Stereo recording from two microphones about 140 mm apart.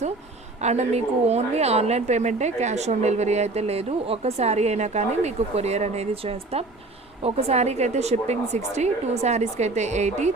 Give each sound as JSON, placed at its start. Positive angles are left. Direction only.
{"t": 0.6, "sound": "a woman's voice", "side_deg": -55}